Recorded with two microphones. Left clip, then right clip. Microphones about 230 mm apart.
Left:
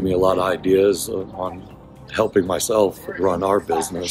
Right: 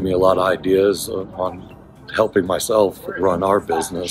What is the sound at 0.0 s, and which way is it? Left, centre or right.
Speech, centre.